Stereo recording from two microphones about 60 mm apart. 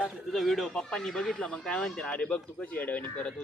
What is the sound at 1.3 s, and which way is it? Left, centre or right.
Speech, left.